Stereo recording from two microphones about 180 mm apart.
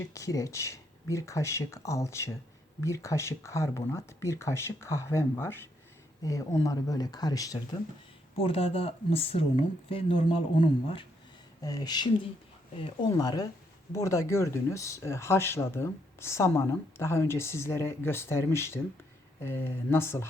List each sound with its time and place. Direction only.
0.1 s speech: 20° left (ahead or behind)
8.4 s speech: 30° left (ahead or behind); by 20.2 s 15° left (ahead or behind)